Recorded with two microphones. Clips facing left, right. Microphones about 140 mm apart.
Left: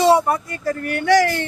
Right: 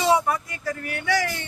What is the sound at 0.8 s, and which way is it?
Speech, 65° left (ahead or behind).